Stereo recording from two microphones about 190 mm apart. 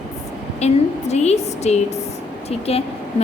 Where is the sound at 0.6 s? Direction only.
35° left (ahead or behind).